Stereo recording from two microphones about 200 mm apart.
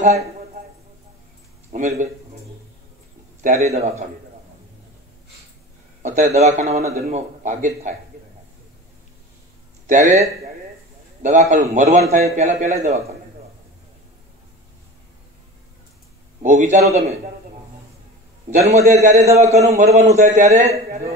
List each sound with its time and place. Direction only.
1.7 s a man's voice: 40° right (ahead or behind)
3.4 s a man's voice: 35° right (ahead or behind)
6.0 s a man's voice: 35° right (ahead or behind)
9.8 s a man's voice: 35° right (ahead or behind)
11.2 s a man's voice: 35° right (ahead or behind)
16.4 s a man's voice: 35° right (ahead or behind)
18.5 s a man's voice: 35° right (ahead or behind)